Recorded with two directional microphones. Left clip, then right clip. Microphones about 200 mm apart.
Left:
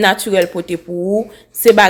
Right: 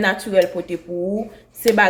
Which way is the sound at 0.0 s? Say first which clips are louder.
Left 4 dB; 50° left (ahead or behind).